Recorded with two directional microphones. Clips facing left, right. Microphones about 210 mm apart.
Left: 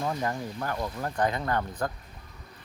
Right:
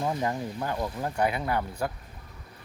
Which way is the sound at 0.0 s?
15° right (ahead or behind).